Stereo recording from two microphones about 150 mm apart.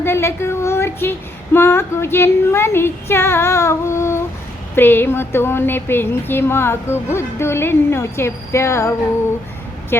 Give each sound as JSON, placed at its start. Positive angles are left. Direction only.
{"t": 0.0, "sound": "a sound", "side_deg": 15}
{"t": 1.5, "sound": "speech", "side_deg": 15}
{"t": 9.9, "sound": "speech", "side_deg": 15}